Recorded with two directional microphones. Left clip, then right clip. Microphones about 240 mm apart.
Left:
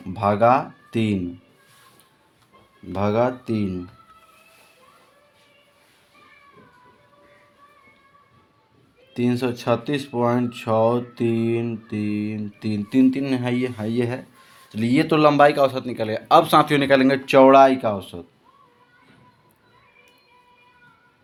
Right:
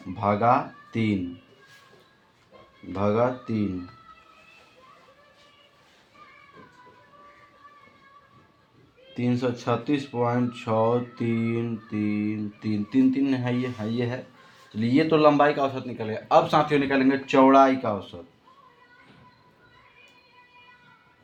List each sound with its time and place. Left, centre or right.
0.2 s speech: left
2.9 s speech: left
9.1 s speech: left